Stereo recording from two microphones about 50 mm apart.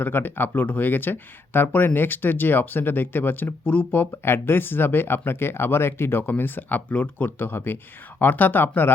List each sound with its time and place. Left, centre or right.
0.0 s speech: left
4.3 s speech: left
7.3 s speech: left